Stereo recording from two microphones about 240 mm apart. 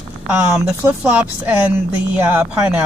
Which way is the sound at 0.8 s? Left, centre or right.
Centre.